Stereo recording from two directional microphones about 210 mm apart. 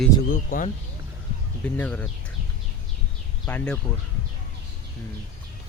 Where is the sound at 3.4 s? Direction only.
10° left (ahead or behind).